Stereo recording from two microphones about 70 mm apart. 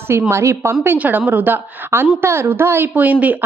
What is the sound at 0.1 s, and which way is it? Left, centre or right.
Speech, right.